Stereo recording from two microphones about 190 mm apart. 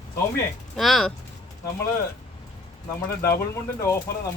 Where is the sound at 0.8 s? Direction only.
Centre (ahead or behind).